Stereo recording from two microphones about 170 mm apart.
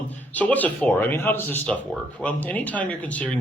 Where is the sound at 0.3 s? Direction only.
10° left (ahead or behind).